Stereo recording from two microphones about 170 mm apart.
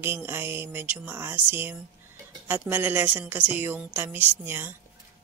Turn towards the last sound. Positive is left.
turn(degrees=-10)  # may be behind; listen again after turning